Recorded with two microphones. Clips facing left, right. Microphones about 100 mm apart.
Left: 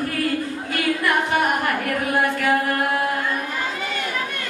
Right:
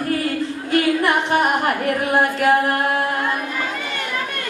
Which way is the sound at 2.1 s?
25° right (ahead or behind).